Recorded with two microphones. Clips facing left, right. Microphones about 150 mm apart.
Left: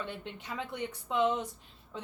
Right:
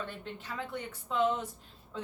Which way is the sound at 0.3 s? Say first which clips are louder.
Left 1 dB; 15° left (ahead or behind).